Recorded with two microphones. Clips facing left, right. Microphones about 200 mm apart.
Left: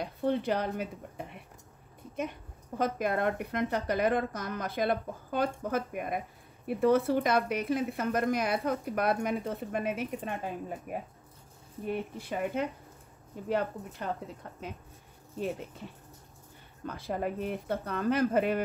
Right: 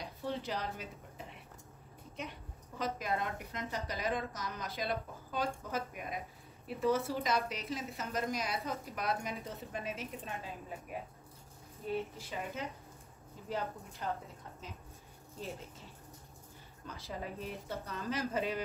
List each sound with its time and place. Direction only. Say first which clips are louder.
0.0 s speech: left 9 dB; 55° left (ahead or behind)
2.8 s a woman's voice: left 7 dB; 55° left (ahead or behind)
16.8 s a woman's voice: left 10 dB; 55° left (ahead or behind)